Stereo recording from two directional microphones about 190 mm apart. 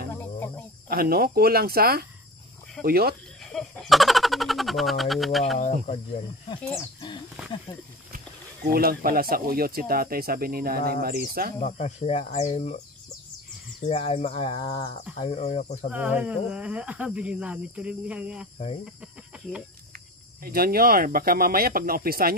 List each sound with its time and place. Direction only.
0.1 s cricket: 10° left (ahead or behind)
0.8 s speech: 50° right (ahead or behind)
3.5 s speech: 5° left (ahead or behind)
5.6 s speech: 40° left (ahead or behind)
6.7 s speech: 25° left (ahead or behind)
8.7 s speech: 50° right (ahead or behind)
11.6 s speech: 35° left (ahead or behind)
13.8 s speech: 35° left (ahead or behind)
15.9 s speech: 10° right (ahead or behind)
20.4 s speech: 50° right (ahead or behind)